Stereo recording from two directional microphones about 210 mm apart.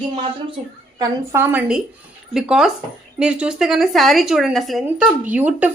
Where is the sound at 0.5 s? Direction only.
15° right (ahead or behind).